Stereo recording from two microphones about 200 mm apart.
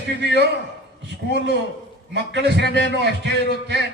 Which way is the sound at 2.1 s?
55° right (ahead or behind).